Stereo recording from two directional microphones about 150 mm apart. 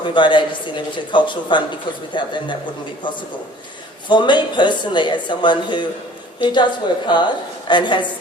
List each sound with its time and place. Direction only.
0.0 s speech: 30° left (ahead or behind)
4.1 s a woman's voice: 30° left (ahead or behind)